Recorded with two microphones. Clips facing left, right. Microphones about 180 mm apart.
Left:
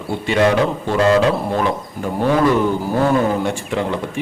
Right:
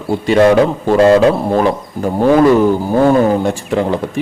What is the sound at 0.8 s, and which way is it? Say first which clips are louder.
Speech: right 6 dB; 40° right (ahead or behind).